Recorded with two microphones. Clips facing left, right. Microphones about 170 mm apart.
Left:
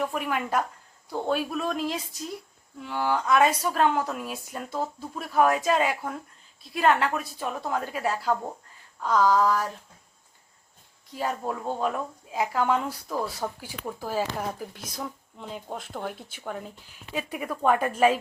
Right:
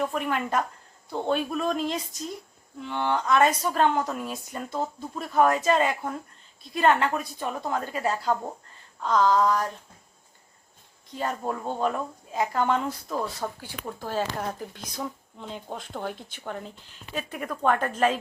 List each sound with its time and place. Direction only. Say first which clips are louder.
0.0 s speech: right 1 dB; 5° left (ahead or behind)
11.1 s speech: even; 5° left (ahead or behind)